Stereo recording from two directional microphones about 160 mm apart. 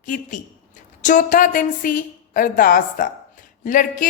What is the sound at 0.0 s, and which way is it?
Speech, 50° left (ahead or behind).